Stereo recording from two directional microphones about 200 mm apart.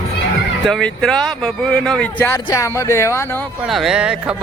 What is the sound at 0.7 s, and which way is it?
Speech, 5° left (ahead or behind).